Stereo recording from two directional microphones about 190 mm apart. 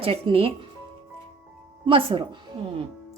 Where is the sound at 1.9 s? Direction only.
30° right (ahead or behind).